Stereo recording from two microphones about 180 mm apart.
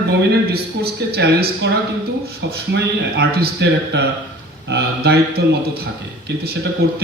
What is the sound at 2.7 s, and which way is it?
Speech, 65° right (ahead or behind).